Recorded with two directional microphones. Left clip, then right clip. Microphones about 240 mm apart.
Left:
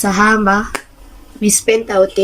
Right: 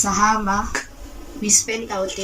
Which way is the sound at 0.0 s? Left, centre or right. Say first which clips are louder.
Left 6 dB; left.